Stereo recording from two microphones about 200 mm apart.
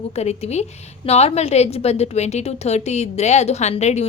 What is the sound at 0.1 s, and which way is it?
A woman's voice, 30° left (ahead or behind).